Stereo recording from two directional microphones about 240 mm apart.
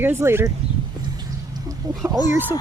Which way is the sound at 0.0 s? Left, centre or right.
Centre.